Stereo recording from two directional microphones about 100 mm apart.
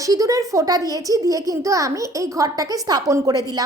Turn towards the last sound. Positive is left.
turn(degrees=-40)  # may be behind; listen again after turning